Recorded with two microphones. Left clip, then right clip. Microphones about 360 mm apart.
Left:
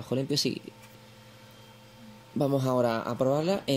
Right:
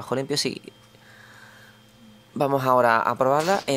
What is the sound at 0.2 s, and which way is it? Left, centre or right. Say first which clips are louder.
Speech: right 3 dB; centre.